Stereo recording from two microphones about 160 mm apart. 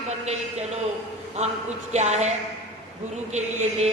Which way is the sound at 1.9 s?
45° right (ahead or behind).